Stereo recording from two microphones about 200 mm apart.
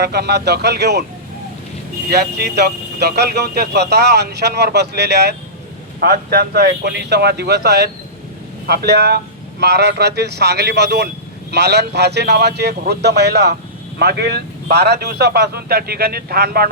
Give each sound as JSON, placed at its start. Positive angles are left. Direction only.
{"t": 0.0, "sound": "speech", "side_deg": -55}
{"t": 2.0, "sound": "speech", "side_deg": -55}